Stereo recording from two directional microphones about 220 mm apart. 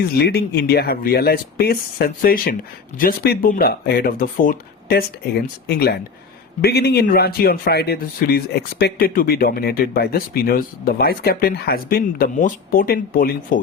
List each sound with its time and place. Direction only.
0.2 s speech: 45° left (ahead or behind)